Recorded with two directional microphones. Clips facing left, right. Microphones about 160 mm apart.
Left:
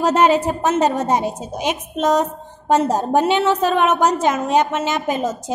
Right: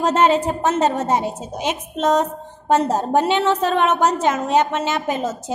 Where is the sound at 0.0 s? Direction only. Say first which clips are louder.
Left 1 dB; 10° left (ahead or behind).